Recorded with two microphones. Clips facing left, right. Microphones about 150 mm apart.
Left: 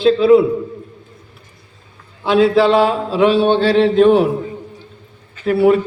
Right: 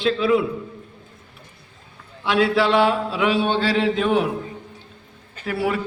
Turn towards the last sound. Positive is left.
turn(degrees=25)  # may be behind; listen again after turning